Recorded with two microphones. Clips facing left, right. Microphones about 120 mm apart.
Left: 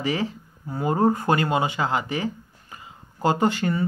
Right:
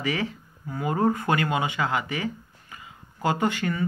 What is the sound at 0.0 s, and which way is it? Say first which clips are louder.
Speech: left 2 dB; 30° left (ahead or behind).